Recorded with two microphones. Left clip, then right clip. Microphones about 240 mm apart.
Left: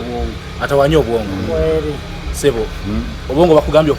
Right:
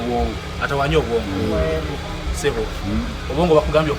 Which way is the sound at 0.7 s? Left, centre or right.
Left.